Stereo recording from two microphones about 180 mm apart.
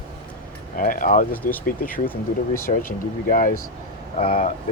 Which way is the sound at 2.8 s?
45° left (ahead or behind).